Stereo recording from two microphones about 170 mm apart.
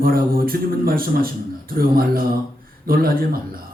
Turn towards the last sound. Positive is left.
turn(degrees=-60)  # may be behind; listen again after turning